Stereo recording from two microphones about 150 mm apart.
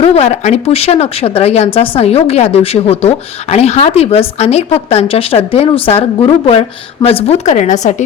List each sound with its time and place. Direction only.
0.0 s speech: 45° left (ahead or behind)